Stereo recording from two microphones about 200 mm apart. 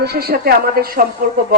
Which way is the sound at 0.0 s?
50° right (ahead or behind).